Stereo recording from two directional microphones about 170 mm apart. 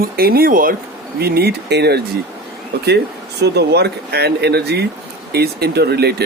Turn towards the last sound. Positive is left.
turn(degrees=-70)  # may be behind; listen again after turning